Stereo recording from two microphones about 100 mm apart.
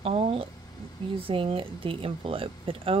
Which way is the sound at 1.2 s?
65° right (ahead or behind).